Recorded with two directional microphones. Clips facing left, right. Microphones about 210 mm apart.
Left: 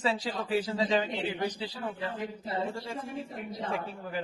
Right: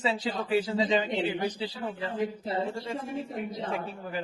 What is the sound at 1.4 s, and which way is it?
Speech, 10° right (ahead or behind).